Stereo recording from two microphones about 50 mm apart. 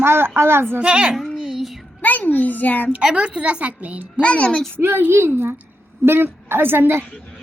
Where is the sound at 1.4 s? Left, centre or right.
Centre.